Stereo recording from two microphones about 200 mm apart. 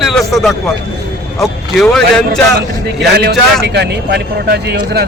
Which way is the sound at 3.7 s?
55° right (ahead or behind).